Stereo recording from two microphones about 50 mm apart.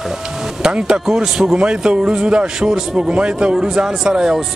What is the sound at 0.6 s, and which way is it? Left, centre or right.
A man's voice, centre.